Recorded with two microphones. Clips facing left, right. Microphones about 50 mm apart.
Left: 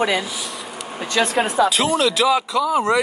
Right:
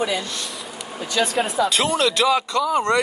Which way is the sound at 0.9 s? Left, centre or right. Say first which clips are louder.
Left 2 dB; left.